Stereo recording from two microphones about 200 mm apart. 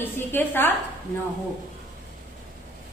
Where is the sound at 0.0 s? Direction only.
10° left (ahead or behind).